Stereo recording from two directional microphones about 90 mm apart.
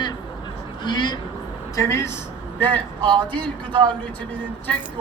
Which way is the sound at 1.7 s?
30° left (ahead or behind).